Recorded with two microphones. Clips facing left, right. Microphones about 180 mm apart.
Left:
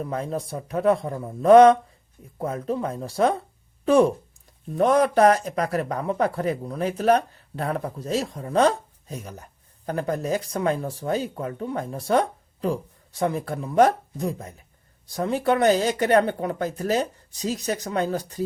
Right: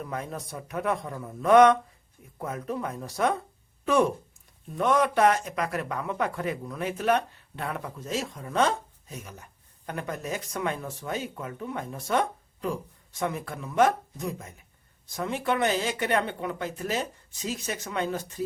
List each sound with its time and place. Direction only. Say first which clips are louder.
0.0 s speech: left 6 dB; 30° left (ahead or behind)